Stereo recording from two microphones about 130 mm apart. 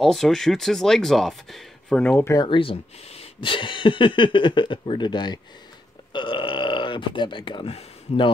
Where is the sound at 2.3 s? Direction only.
35° left (ahead or behind).